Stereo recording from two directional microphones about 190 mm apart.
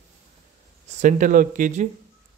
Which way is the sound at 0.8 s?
40° right (ahead or behind).